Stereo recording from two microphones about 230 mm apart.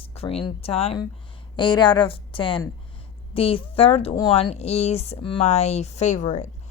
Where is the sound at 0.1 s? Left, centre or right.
Left.